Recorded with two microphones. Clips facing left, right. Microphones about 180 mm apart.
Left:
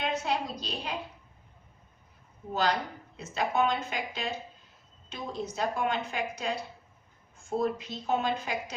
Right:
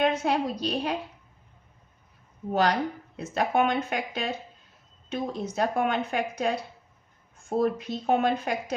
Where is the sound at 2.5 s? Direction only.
60° right (ahead or behind).